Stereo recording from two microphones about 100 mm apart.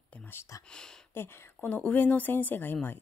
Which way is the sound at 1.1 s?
20° left (ahead or behind).